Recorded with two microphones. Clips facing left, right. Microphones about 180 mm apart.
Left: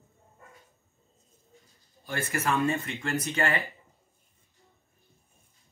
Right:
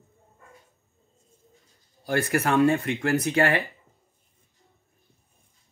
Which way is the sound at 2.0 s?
65° right (ahead or behind).